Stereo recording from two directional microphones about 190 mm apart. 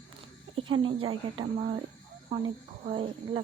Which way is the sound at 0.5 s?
25° right (ahead or behind).